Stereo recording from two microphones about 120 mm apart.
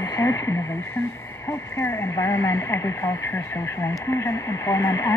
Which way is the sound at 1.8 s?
20° left (ahead or behind).